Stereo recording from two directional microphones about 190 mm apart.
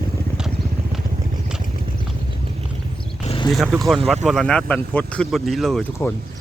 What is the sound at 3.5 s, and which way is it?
Speech, centre (ahead or behind).